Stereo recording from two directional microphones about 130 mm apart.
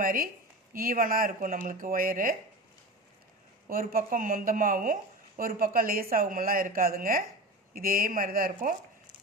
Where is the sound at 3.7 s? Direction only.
90° right.